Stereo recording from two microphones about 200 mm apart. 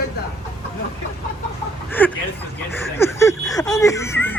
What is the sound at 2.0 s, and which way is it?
Speech, 10° left (ahead or behind).